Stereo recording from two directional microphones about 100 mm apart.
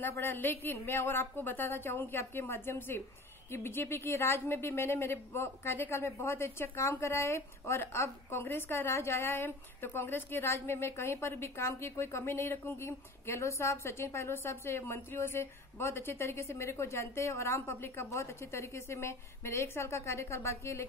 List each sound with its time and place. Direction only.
0.0 s a woman's voice: 20° left (ahead or behind)